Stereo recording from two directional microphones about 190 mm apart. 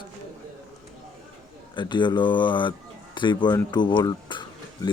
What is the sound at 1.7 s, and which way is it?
Speech, 25° left (ahead or behind).